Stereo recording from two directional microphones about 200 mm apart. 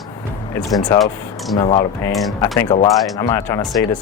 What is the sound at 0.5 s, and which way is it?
Speech, 20° left (ahead or behind).